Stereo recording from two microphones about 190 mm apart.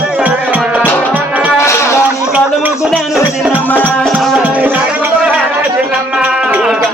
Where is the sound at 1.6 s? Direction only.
15° left (ahead or behind).